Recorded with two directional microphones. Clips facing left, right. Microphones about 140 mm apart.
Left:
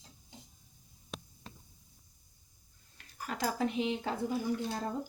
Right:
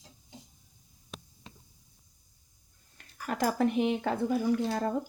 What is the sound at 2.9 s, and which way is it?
Speech, 50° right (ahead or behind).